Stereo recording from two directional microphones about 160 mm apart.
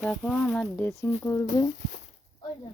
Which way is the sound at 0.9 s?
15° left (ahead or behind).